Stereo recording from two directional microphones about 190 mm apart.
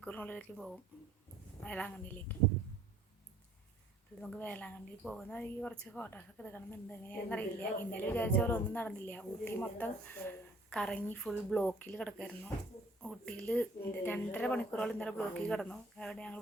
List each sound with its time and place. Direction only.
0.0 s speech: 10° left (ahead or behind)
4.2 s speech: 10° left (ahead or behind)